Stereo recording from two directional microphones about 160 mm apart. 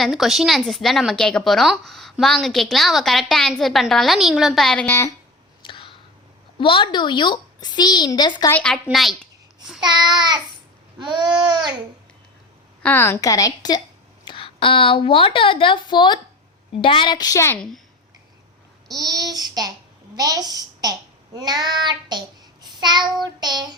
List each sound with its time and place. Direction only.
0.0 s a woman's voice: centre (ahead or behind); by 5.1 s 15° left (ahead or behind)
5.6 s a sound: 30° left (ahead or behind)
6.6 s a child's voice: 30° left (ahead or behind)
8.5 s a woman's voice: 5° left (ahead or behind)
9.8 s babbling: 25° right (ahead or behind)
12.8 s a child's voice: 15° left (ahead or behind)
18.9 s babbling: 25° right (ahead or behind)
20.1 s a child's voice: 25° right (ahead or behind)
21.3 s babbling: 25° right (ahead or behind)
22.6 s child singing: 25° right (ahead or behind)
23.2 s babbling: 25° right (ahead or behind)